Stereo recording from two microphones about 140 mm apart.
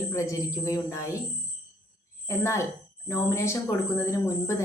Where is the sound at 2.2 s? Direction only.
20° left (ahead or behind).